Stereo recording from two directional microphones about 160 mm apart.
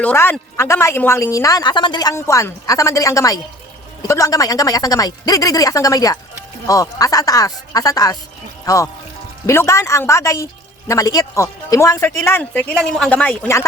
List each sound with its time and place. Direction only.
0.0 s speech: 10° left (ahead or behind)